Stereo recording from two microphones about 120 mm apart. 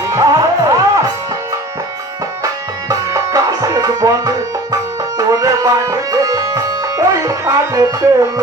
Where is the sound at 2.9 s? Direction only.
25° right (ahead or behind).